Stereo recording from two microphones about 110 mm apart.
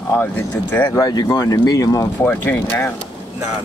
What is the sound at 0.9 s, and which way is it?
Speech, 35° left (ahead or behind).